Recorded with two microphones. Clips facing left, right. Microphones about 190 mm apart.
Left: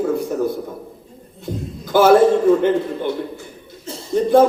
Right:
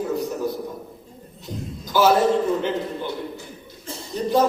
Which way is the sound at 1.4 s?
55° left (ahead or behind).